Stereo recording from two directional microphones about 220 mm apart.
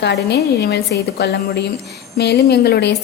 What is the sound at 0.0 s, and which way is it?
A woman's voice, 50° left (ahead or behind).